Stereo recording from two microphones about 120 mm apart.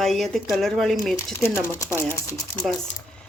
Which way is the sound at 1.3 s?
20° left (ahead or behind).